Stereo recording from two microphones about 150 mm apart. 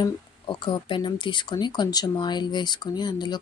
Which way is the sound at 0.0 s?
30° left (ahead or behind).